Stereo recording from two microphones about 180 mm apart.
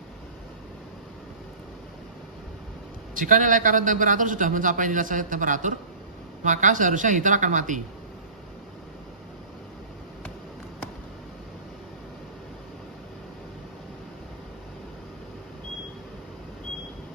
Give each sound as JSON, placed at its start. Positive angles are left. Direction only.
{"t": 3.2, "sound": "a man's voice", "side_deg": -45}